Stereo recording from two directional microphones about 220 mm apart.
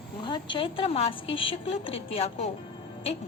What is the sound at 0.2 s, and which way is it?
A woman's voice, 20° left (ahead or behind).